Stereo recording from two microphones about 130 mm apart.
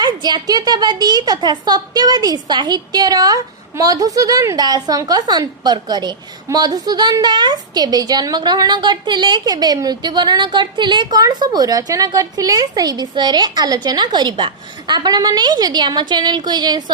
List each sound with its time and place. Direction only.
0.0 s a woman's voice: 35° right (ahead or behind)